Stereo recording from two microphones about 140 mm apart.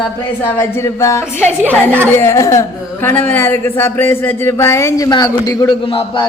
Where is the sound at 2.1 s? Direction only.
20° left (ahead or behind).